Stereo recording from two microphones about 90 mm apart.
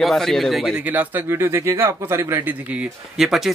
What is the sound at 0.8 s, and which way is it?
Speech, 20° right (ahead or behind).